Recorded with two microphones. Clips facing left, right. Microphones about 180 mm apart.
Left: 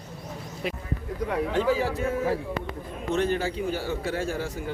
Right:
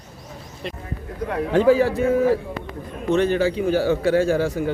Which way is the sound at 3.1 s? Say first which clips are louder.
Right 7 dB; 80° right.